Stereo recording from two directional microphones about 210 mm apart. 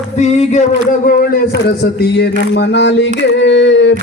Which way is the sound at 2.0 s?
55° left (ahead or behind).